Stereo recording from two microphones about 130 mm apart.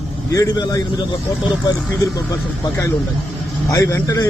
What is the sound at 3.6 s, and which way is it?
Speech, 25° left (ahead or behind).